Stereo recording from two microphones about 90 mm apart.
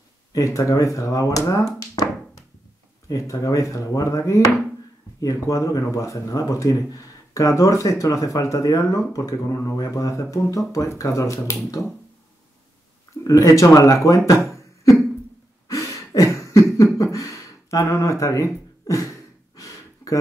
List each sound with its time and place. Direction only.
0.3 s speech: 35° left (ahead or behind)
3.1 s speech: 35° left (ahead or behind)
13.2 s speech: 40° left (ahead or behind)
15.7 s cough: 40° left (ahead or behind)